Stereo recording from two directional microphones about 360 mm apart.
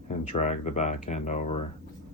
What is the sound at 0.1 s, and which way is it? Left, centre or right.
Speech, centre.